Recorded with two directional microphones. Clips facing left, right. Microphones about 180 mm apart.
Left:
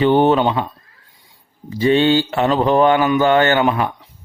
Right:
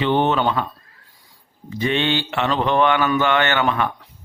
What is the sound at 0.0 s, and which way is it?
Speech, 40° left (ahead or behind).